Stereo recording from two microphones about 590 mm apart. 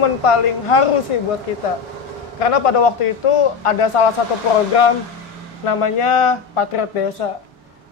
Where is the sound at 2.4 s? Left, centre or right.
Left.